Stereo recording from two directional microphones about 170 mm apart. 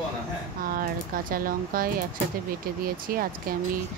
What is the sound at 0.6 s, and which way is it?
Speech, 55° right (ahead or behind).